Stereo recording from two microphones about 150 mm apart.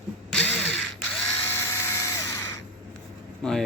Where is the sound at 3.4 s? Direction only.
5° left (ahead or behind).